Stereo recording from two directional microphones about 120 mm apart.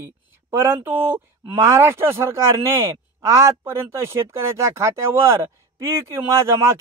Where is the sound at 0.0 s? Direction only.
20° right (ahead or behind).